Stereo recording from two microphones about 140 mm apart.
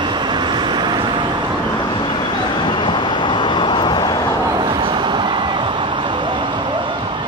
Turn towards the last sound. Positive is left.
turn(degrees=-35)  # may be behind; listen again after turning